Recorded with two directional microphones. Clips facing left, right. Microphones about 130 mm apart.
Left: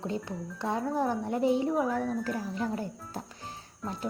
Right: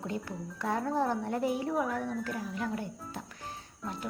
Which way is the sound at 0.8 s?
10° left (ahead or behind).